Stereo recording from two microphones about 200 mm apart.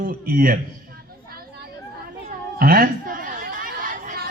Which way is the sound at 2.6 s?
45° right (ahead or behind).